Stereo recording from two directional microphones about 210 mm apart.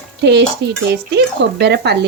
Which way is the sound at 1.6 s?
55° right (ahead or behind).